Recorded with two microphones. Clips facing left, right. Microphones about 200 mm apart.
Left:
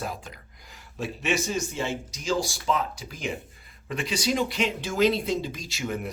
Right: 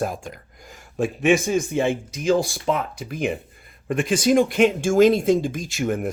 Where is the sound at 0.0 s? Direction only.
50° right (ahead or behind).